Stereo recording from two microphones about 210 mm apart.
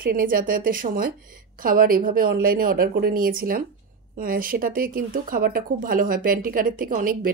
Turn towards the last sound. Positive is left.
turn(degrees=-40)  # may be behind; listen again after turning